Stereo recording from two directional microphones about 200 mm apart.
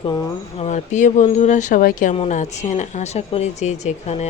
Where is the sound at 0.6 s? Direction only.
35° left (ahead or behind).